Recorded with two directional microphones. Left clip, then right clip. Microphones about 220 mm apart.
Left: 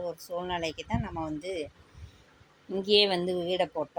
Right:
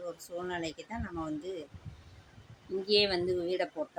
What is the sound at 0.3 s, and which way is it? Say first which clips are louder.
Speech: left 4 dB; 10° left (ahead or behind).